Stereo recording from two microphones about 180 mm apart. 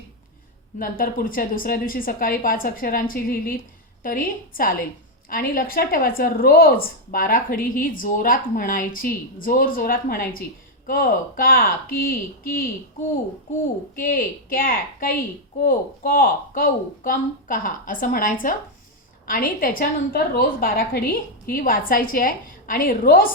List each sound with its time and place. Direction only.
0.8 s a woman's voice: 50° left (ahead or behind)
13.9 s a woman's voice: 55° left (ahead or behind)